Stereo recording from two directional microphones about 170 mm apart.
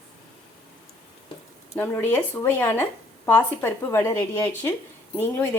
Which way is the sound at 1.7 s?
10° left (ahead or behind).